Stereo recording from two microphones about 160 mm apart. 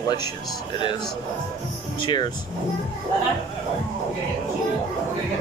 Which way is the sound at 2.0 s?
30° left (ahead or behind).